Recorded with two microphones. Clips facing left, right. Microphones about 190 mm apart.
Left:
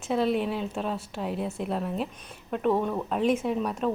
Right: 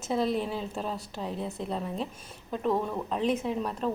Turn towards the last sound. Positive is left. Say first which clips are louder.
# left 3 dB
turn(degrees=5)  # may be behind; listen again after turning